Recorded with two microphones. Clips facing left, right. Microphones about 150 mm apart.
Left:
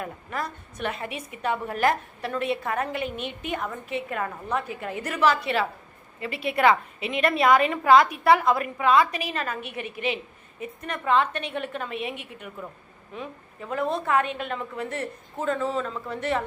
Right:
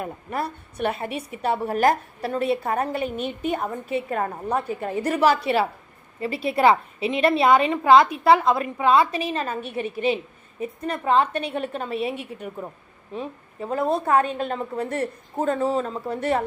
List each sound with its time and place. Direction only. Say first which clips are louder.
0.0 s a woman's voice: right 3 dB; 30° right (ahead or behind)